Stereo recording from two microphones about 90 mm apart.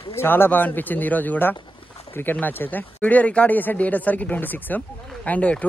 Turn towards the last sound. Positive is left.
turn(degrees=15)  # may be behind; listen again after turning